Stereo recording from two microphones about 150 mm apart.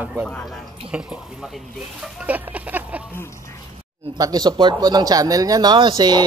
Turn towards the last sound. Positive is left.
turn(degrees=-30)  # may be behind; listen again after turning